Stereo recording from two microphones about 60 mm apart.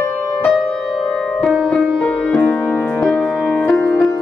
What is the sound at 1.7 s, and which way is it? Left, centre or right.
Music, centre.